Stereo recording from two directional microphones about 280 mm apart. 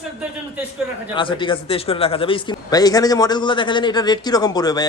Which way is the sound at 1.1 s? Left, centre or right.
Centre.